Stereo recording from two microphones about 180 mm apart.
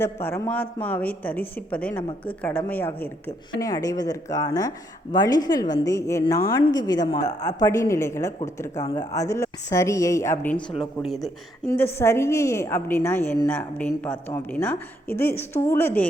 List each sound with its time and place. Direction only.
0.0 s a woman's voice: 15° left (ahead or behind)
10.7 s speech: centre (ahead or behind)
11.9 s a woman's voice: 15° left (ahead or behind)